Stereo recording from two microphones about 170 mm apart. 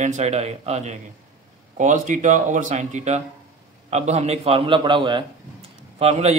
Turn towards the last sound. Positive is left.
turn(degrees=-40)  # may be behind; listen again after turning